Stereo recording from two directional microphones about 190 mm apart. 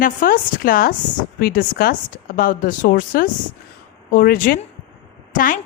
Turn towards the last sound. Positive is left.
turn(degrees=45)  # may be behind; listen again after turning